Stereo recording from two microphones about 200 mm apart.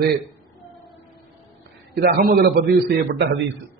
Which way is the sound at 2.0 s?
50° right (ahead or behind).